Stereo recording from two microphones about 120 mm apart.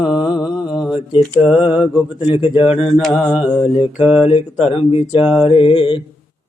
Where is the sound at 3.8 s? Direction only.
15° right (ahead or behind).